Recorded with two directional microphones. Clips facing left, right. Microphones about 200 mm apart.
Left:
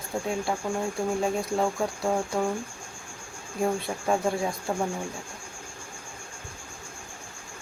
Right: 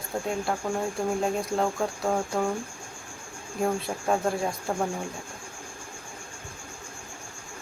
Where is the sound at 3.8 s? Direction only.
Centre (ahead or behind).